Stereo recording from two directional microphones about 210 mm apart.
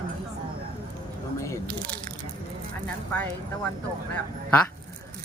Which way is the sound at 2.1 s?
40° right (ahead or behind).